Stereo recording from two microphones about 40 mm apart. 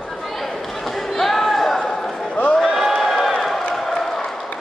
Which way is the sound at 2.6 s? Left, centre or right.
Centre.